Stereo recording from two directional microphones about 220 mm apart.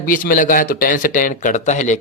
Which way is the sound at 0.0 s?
40° left (ahead or behind).